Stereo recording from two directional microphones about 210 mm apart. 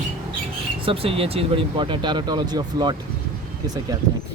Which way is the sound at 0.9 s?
25° right (ahead or behind).